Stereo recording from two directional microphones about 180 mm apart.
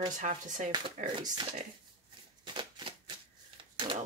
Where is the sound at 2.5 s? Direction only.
25° right (ahead or behind).